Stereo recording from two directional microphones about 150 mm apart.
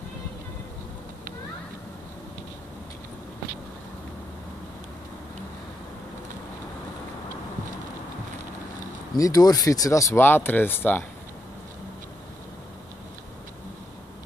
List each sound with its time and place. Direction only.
9.2 s speech: 25° left (ahead or behind)